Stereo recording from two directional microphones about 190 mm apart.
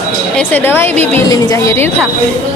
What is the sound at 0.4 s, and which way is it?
Speech, 10° left (ahead or behind).